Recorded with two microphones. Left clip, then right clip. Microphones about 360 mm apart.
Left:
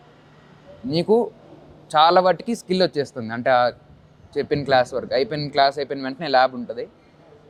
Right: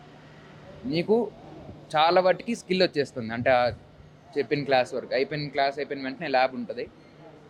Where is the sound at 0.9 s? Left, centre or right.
Left.